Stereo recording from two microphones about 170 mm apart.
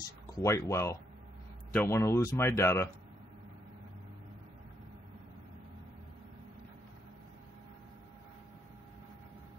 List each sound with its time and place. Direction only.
0.0 s speech: 20° left (ahead or behind)